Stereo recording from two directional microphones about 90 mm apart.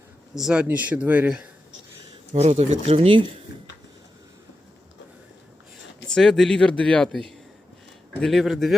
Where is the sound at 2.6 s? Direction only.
80° right.